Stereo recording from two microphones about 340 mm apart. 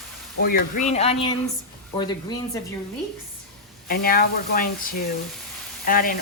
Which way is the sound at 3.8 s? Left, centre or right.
Left.